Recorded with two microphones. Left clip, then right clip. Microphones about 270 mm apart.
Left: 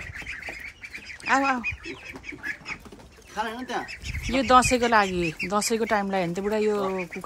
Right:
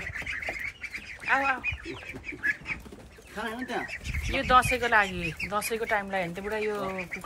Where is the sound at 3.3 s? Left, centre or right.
Left.